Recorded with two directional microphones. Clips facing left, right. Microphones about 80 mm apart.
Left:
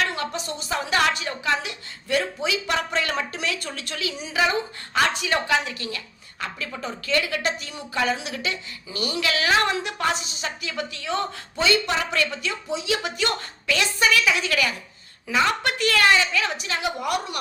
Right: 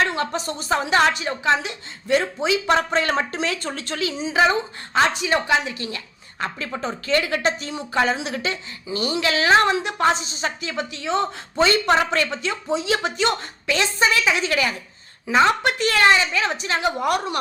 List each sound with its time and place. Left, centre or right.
0.0 s a woman's voice: right
0.9 s a woman's voice: right
11.6 s a woman's voice: right